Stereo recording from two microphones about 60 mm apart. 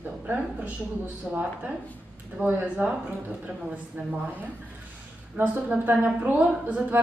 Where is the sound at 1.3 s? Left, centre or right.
Right.